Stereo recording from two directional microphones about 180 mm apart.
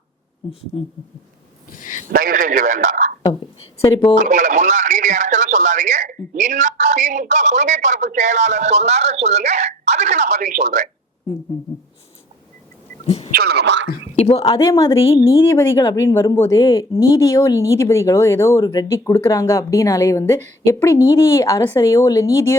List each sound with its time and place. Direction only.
0.7 s speech: 30° left (ahead or behind)
1.7 s a sound: 45° left (ahead or behind)
2.1 s a man's voice: 50° right (ahead or behind)
4.2 s speech: 45° right (ahead or behind)
13.3 s speech: 60° right (ahead or behind)
14.2 s speech: 30° left (ahead or behind)